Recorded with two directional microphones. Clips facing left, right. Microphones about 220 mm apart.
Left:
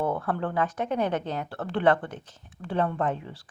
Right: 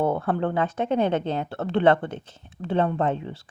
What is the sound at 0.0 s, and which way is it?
Speech, 25° right (ahead or behind).